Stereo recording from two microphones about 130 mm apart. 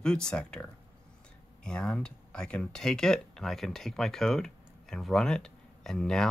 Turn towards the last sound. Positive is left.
turn(degrees=5)  # may be behind; listen again after turning